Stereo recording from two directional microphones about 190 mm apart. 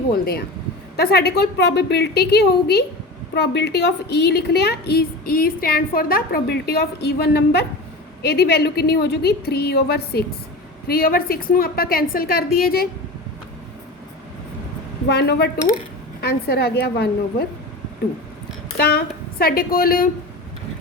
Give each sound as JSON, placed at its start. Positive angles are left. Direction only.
{"t": 0.1, "sound": "a woman's voice", "side_deg": 55}
{"t": 15.1, "sound": "a woman's voice", "side_deg": 60}
{"t": 18.8, "sound": "a woman's voice", "side_deg": 55}